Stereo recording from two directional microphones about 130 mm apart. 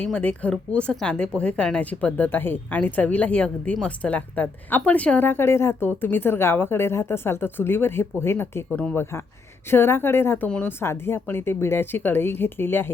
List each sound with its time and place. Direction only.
0.0 s speech: 10° left (ahead or behind)